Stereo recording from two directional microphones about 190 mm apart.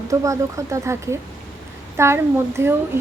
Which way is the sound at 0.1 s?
15° right (ahead or behind).